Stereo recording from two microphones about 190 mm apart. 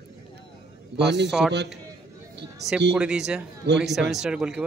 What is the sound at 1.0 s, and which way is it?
Speech, 65° right (ahead or behind).